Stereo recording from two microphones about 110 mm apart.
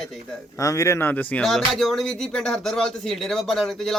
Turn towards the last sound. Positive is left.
turn(degrees=0)  # may be behind; listen again after turning